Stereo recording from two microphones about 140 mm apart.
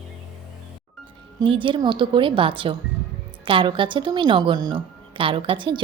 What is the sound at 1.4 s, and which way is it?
A woman's voice, 35° right (ahead or behind).